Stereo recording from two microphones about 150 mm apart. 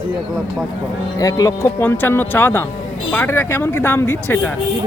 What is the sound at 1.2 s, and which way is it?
Speech, 25° left (ahead or behind).